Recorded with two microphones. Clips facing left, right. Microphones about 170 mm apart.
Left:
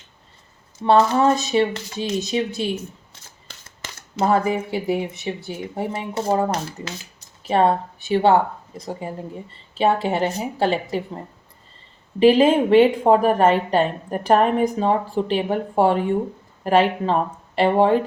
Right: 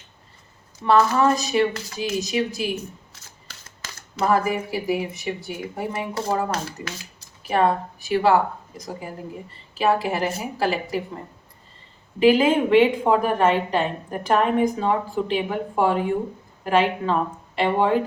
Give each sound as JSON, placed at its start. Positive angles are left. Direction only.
{"t": 0.9, "sound": "speech", "side_deg": 30}
{"t": 3.8, "sound": "speech", "side_deg": 25}
{"t": 12.2, "sound": "a woman's voice", "side_deg": 30}